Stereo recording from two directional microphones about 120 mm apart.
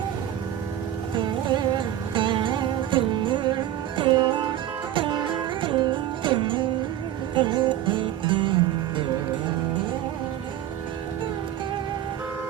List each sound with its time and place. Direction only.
1.1 s music: 40° right (ahead or behind)